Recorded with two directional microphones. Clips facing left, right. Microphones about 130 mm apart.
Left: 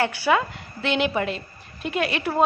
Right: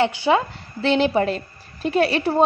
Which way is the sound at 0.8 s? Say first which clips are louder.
Right 5 dB; 35° right (ahead or behind).